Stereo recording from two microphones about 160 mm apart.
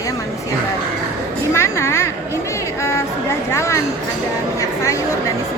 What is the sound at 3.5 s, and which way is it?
Speech, 15° left (ahead or behind).